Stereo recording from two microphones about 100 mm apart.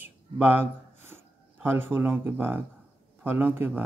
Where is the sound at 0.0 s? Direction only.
20° right (ahead or behind).